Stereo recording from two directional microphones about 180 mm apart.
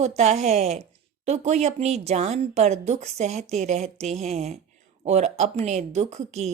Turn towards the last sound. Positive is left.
turn(degrees=-40)  # may be behind; listen again after turning